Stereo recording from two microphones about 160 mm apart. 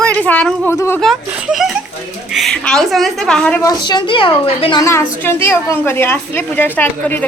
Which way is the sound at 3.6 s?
25° left (ahead or behind).